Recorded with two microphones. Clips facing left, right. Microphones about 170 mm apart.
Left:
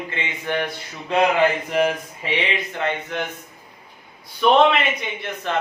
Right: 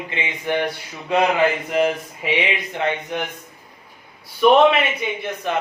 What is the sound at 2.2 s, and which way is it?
Speech, 15° right (ahead or behind).